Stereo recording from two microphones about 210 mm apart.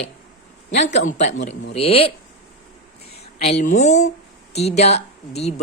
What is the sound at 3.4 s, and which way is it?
Speech, 30° left (ahead or behind).